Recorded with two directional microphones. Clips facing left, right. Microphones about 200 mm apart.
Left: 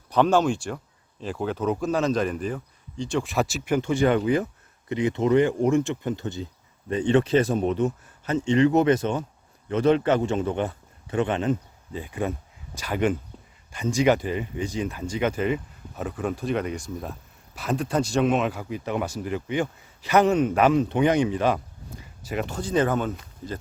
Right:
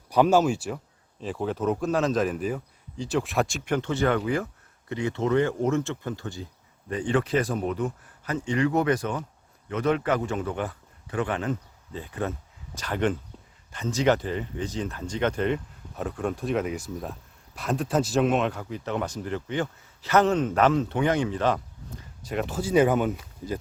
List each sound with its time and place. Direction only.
0.1 s a man's voice: 10° right (ahead or behind)